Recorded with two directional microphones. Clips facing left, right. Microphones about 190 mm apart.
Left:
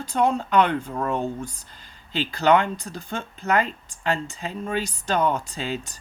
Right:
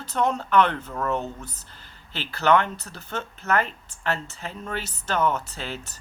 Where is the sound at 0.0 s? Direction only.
10° left (ahead or behind).